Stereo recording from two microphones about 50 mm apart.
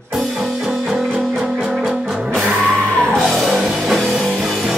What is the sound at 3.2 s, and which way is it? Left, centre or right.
Music, centre.